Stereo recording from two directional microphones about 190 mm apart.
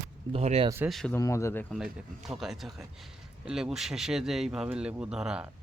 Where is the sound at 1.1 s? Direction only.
15° left (ahead or behind).